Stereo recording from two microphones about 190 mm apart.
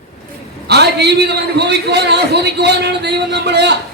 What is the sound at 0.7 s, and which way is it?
A man's voice, 60° right (ahead or behind).